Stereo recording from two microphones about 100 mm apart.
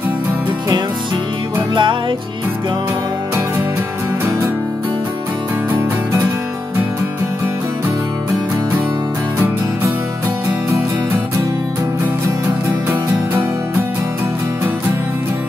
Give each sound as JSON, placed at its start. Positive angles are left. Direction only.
{"t": 1.8, "sound": "music", "side_deg": -55}